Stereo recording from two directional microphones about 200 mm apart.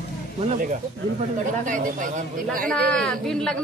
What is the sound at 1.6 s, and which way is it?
Speech, 40° right (ahead or behind).